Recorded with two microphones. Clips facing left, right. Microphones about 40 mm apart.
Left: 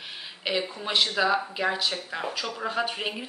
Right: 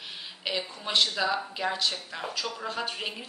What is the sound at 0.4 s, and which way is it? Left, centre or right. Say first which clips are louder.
Speech: left 4 dB; centre.